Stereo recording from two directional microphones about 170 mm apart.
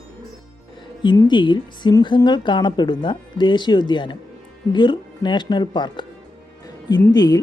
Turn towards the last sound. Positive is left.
turn(degrees=25)  # may be behind; listen again after turning